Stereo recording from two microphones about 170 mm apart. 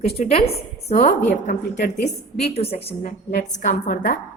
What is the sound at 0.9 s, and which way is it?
Speech, 40° left (ahead or behind).